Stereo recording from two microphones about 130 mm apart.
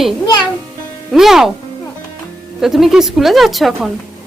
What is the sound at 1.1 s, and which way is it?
Speech, 5° right (ahead or behind).